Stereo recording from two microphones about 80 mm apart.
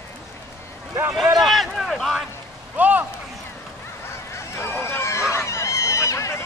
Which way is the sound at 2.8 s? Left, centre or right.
Right.